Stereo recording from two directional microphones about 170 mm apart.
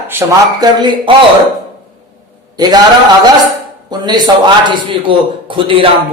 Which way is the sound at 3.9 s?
25° right (ahead or behind).